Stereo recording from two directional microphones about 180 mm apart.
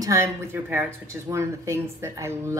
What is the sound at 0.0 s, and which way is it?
A woman's voice, 15° right (ahead or behind).